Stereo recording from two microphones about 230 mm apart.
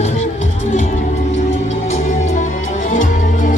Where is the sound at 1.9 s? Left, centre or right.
Left.